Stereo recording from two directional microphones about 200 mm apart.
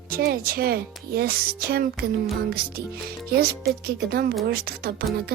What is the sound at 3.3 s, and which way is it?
Speech, 50° right (ahead or behind).